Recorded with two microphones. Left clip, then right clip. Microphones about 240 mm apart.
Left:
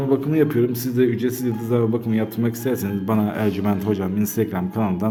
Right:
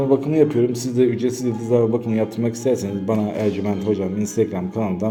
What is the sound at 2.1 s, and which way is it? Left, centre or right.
A man's voice, centre.